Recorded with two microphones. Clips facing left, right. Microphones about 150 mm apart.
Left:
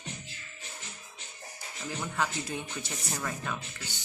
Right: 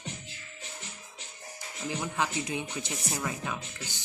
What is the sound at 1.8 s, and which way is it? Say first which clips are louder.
Speech: right 1 dB; 15° right (ahead or behind).